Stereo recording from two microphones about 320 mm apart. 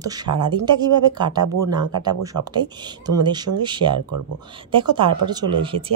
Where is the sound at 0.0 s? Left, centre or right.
Centre.